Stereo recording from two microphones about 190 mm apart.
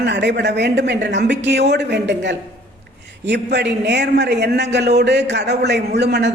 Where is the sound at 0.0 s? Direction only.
65° right (ahead or behind).